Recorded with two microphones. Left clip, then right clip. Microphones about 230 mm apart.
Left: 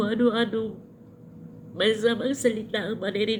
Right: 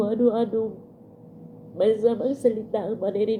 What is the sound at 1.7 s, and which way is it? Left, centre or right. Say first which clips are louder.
A woman's voice: right 2 dB; centre.